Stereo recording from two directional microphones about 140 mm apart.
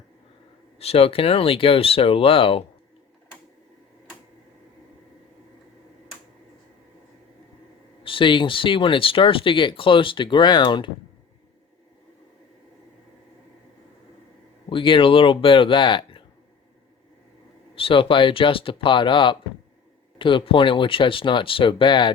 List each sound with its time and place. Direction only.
0.8 s speech: 45° left (ahead or behind)
8.0 s speech: 35° left (ahead or behind)
14.7 s speech: 35° left (ahead or behind)
17.7 s speech: 40° left (ahead or behind)